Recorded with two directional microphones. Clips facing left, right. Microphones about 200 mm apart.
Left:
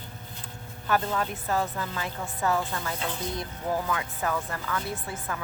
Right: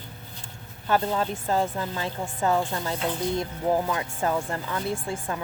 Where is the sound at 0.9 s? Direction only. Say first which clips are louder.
Right 3 dB; 30° right (ahead or behind).